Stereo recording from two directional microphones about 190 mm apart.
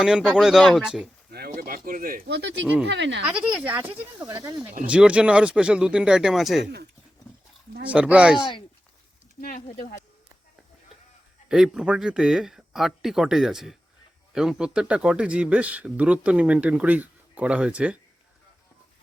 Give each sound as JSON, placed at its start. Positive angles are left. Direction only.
{"t": 0.0, "sound": "speech", "side_deg": -5}
{"t": 1.3, "sound": "speech", "side_deg": -50}
{"t": 3.2, "sound": "speech", "side_deg": -5}
{"t": 7.9, "sound": "speech", "side_deg": -5}
{"t": 9.4, "sound": "speech", "side_deg": 45}
{"t": 11.4, "sound": "speech", "side_deg": -5}